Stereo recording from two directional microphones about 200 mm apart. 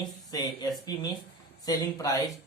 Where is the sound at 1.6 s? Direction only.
20° left (ahead or behind).